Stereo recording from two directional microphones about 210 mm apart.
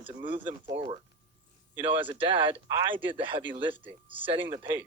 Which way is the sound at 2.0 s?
25° right (ahead or behind).